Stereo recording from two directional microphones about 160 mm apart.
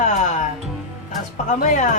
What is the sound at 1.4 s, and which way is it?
Speech, 50° left (ahead or behind).